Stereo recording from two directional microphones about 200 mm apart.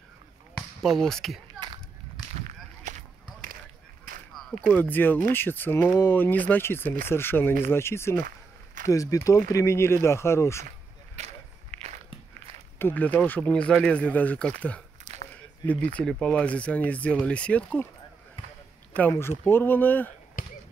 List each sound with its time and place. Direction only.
0.6 s speech: centre (ahead or behind)
2.4 s a sound: 40° right (ahead or behind)
4.4 s speech: 5° left (ahead or behind)
11.1 s a sound: 35° right (ahead or behind)
12.7 s speech: 10° left (ahead or behind)
15.1 s a sound: 35° right (ahead or behind)
16.0 s speech: 5° left (ahead or behind)
18.9 s speech: 10° left (ahead or behind)
20.4 s basketball bounce: 40° left (ahead or behind)